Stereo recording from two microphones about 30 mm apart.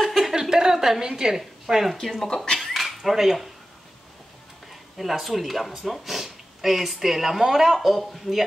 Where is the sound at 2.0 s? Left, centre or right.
Centre.